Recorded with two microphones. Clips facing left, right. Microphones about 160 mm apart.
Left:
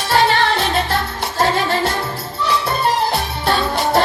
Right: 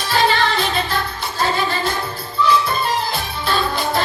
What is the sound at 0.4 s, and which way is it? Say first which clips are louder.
Music: left 2 dB; 70° left (ahead or behind).